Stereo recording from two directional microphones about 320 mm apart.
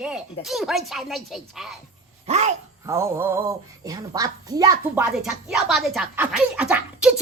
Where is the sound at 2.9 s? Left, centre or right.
Centre.